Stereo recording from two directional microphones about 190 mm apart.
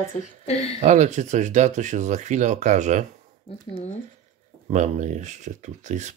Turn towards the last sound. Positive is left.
turn(degrees=-40)  # may be behind; listen again after turning